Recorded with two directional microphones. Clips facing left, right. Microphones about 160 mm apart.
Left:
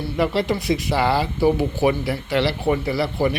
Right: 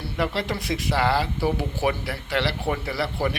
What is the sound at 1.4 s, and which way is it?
Speech, 20° left (ahead or behind).